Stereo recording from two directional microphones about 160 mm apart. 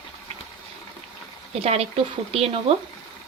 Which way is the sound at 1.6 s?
40° right (ahead or behind).